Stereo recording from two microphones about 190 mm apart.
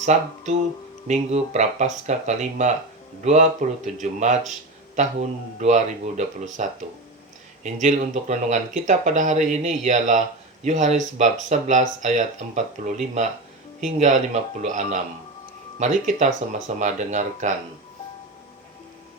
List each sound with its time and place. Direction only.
0.0 s speech: 40° right (ahead or behind)
5.5 s speech: 40° right (ahead or behind)